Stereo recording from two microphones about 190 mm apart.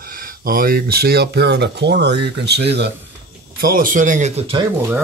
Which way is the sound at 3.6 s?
45° right (ahead or behind).